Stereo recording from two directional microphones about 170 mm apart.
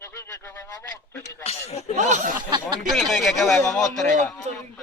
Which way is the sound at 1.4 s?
40° left (ahead or behind).